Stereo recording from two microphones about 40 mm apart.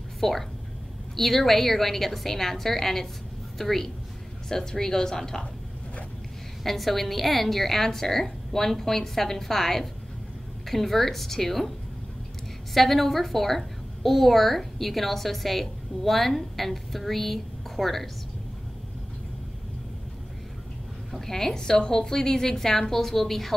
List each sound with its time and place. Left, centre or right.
0.2 s a woman's voice: centre
6.6 s a woman's voice: centre
12.7 s a woman's voice: centre
21.1 s a woman's voice: centre